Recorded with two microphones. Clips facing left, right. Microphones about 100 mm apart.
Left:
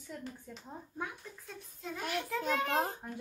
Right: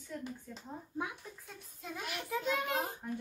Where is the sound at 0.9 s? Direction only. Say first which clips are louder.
Right 2 dB; 15° right (ahead or behind).